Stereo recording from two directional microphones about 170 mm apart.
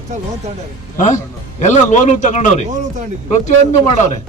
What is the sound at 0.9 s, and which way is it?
Speech, 45° left (ahead or behind).